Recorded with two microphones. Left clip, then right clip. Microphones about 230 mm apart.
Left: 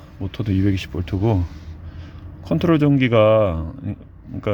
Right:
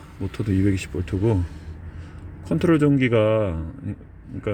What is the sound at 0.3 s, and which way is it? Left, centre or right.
Speech, centre.